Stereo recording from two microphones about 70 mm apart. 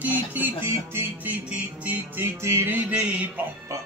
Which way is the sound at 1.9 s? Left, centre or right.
Right.